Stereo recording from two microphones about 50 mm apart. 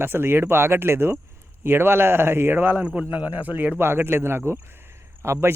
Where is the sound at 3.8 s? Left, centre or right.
Right.